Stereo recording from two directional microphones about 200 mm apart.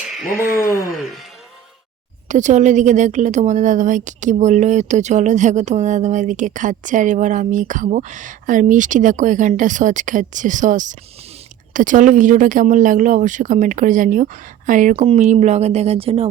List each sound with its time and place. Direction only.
0.6 s speech: 15° left (ahead or behind)
2.2 s speech: 35° right (ahead or behind)